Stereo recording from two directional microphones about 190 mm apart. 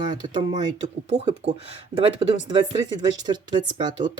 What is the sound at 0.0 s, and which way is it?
Speech, 25° right (ahead or behind).